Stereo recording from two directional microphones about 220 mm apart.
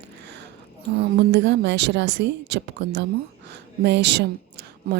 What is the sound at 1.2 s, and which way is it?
A woman's voice, 50° right (ahead or behind).